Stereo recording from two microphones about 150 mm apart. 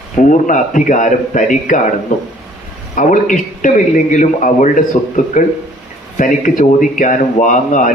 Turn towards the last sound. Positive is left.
turn(degrees=55)  # may be behind; listen again after turning